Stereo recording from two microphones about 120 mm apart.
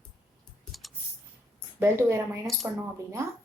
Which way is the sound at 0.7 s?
Centre (ahead or behind).